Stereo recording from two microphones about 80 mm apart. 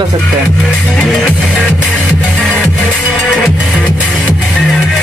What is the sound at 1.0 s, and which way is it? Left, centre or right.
Music, centre.